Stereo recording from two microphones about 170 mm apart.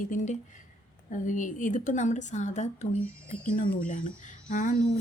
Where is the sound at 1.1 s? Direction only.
50° left (ahead or behind).